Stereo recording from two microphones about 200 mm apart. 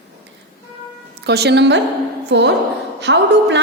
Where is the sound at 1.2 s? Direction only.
55° right (ahead or behind).